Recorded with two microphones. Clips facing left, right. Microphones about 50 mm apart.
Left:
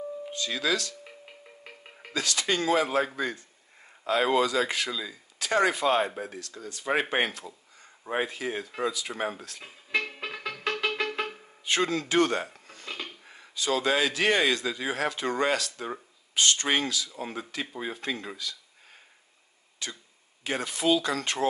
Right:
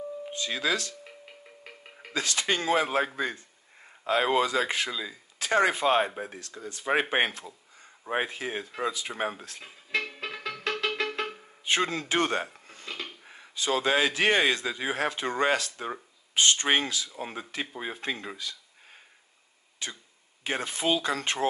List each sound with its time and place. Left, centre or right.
0.3 s speech: right
1.6 s music: centre
2.1 s speech: right
9.6 s music: centre
11.6 s speech: right
19.8 s cough: right
20.4 s speech: right